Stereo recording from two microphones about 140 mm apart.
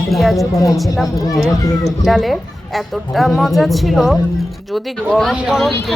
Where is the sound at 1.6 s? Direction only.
25° left (ahead or behind).